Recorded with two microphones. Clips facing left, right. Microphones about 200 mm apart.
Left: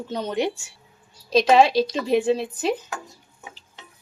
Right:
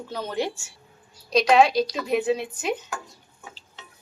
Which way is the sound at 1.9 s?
30° left (ahead or behind).